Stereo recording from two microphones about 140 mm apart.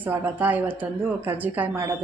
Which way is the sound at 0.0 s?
15° right (ahead or behind).